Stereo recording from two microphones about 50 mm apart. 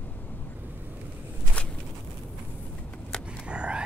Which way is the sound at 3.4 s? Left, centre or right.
Right.